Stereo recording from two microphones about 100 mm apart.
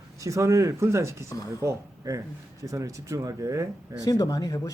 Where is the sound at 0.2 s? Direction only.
30° right (ahead or behind).